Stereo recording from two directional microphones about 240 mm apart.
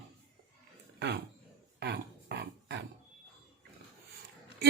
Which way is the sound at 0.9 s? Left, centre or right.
Right.